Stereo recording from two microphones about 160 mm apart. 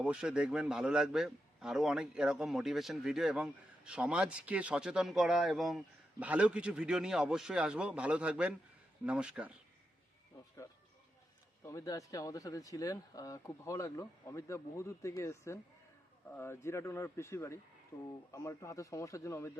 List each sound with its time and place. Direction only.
0.0 s a man's voice: 5° right (ahead or behind)
11.6 s speech: 20° left (ahead or behind)